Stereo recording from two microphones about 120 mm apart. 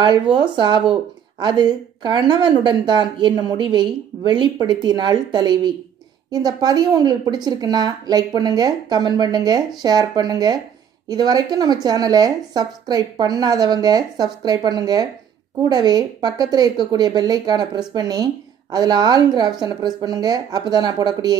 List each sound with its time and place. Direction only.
0.0 s a woman's voice: 40° right (ahead or behind)